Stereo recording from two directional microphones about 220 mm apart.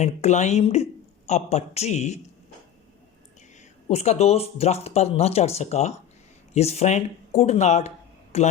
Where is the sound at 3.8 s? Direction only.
30° left (ahead or behind).